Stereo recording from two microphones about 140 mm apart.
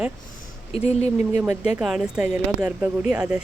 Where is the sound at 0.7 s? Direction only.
50° left (ahead or behind).